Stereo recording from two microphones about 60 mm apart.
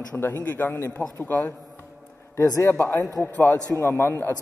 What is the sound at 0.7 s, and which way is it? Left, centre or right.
A man's voice, left.